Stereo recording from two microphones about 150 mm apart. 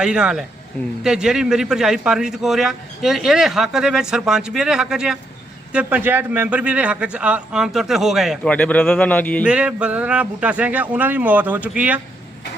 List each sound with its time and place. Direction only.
0.0 s a man's voice: 5° right (ahead or behind)
8.4 s speech: 10° left (ahead or behind)
9.4 s a man's voice: 5° right (ahead or behind)